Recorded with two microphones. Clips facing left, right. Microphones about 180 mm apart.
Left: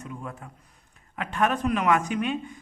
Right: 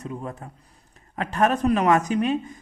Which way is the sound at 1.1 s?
40° right (ahead or behind).